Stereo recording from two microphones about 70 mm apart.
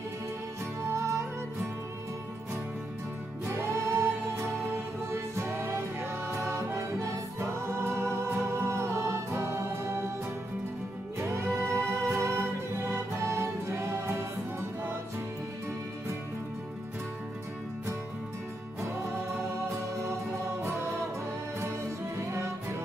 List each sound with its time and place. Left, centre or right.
0.8 s music: right
3.4 s music: right
11.1 s music: right